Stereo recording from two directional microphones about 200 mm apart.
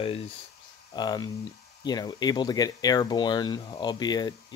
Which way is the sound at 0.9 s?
20° left (ahead or behind).